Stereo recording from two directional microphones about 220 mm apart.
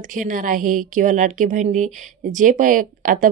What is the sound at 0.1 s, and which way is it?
Speech, 35° right (ahead or behind).